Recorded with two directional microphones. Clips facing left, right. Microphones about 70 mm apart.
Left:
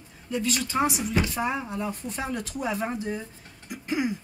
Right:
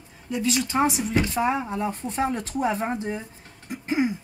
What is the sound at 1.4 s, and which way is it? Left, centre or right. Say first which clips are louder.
A woman's voice: right 4 dB; right.